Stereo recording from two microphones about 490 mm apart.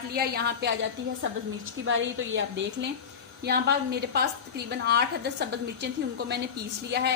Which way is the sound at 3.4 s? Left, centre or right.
Centre.